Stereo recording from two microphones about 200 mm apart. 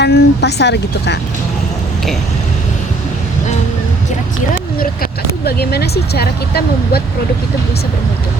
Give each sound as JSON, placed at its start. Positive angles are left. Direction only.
{"t": 0.0, "sound": "speech", "side_deg": 55}
{"t": 5.5, "sound": "speech", "side_deg": 55}